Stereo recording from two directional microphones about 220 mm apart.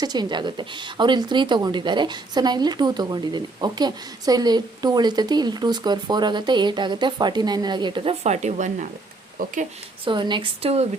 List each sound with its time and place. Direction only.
0.0 s a woman's voice: 20° right (ahead or behind); by 9.5 s 40° right (ahead or behind)
10.1 s speech: 20° right (ahead or behind)